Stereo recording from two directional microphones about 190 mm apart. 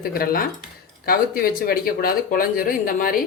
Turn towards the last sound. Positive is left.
turn(degrees=50)  # may be behind; listen again after turning